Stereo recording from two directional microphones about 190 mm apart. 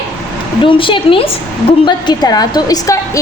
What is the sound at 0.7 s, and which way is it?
A woman's voice, 25° left (ahead or behind).